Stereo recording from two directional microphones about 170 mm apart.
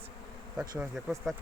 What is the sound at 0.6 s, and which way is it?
Speech, centre (ahead or behind).